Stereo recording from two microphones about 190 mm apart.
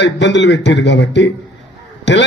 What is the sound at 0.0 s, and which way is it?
A man's voice, 70° left (ahead or behind).